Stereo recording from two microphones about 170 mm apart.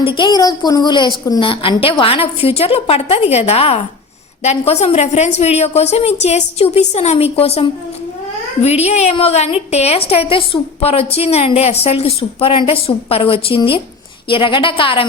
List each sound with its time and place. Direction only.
0.0 s a woman's voice: 25° left (ahead or behind)